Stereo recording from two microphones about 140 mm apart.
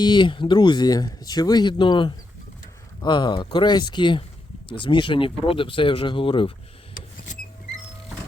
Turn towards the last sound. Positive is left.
turn(degrees=65)  # may be behind; listen again after turning